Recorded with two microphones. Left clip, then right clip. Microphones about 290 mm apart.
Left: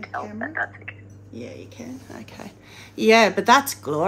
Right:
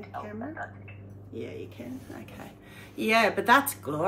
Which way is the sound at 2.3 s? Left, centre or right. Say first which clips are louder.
Left 5 dB; left.